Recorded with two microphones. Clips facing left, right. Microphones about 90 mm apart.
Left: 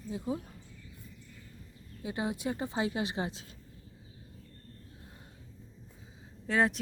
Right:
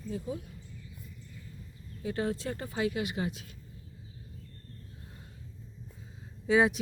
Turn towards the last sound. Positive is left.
turn(degrees=-5)  # may be behind; listen again after turning